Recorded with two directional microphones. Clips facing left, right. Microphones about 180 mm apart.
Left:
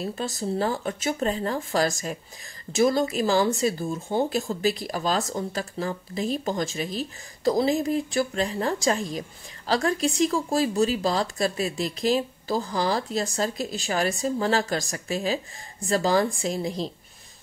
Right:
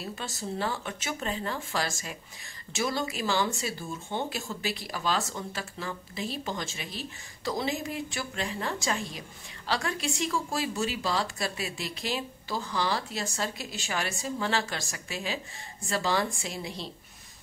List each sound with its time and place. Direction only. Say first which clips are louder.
0.0 s speech: left 7 dB; 35° left (ahead or behind)